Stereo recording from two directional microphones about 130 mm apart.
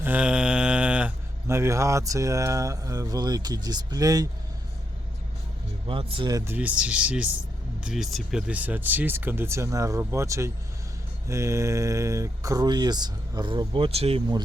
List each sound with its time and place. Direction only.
0.0 s mantra: 10° right (ahead or behind)
1.5 s speech: 20° right (ahead or behind)
5.9 s speech: 45° right (ahead or behind)
6.3 s speech: 20° right (ahead or behind)
6.6 s speech: 10° right (ahead or behind); by 14.2 s 50° right (ahead or behind)